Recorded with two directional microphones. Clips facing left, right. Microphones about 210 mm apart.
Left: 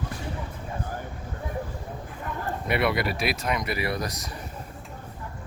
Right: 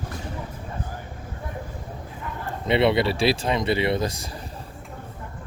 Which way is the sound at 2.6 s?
25° right (ahead or behind).